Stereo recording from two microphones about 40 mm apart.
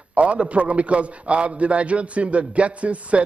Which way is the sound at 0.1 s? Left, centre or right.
Right.